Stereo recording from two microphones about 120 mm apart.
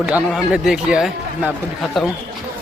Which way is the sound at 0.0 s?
5° right (ahead or behind).